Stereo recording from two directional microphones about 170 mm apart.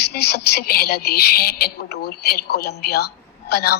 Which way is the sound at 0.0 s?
75° left (ahead or behind).